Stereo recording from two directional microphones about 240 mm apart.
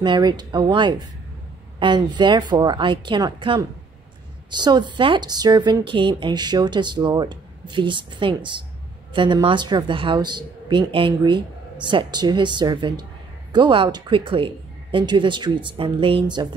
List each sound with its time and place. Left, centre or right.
0.0 s a woman's voice: centre